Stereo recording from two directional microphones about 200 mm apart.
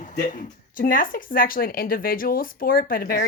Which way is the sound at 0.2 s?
40° left (ahead or behind).